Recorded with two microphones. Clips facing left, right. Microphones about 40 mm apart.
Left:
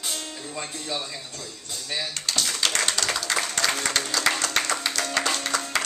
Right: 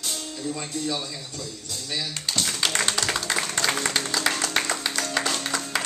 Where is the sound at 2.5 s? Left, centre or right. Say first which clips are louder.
Right 1 dB; centre.